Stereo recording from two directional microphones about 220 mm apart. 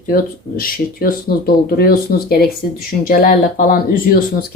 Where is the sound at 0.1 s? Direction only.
40° left (ahead or behind).